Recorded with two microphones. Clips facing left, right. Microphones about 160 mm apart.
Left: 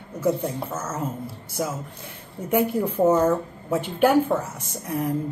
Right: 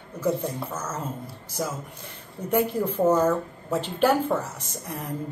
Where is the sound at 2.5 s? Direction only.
10° left (ahead or behind).